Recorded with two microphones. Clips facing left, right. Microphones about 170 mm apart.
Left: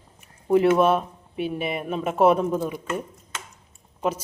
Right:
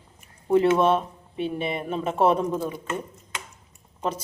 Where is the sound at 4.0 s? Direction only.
10° left (ahead or behind).